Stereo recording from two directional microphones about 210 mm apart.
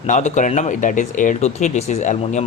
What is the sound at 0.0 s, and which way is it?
Speech, 35° left (ahead or behind).